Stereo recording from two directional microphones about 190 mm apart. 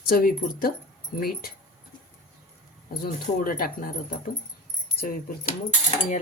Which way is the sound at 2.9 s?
50° left (ahead or behind).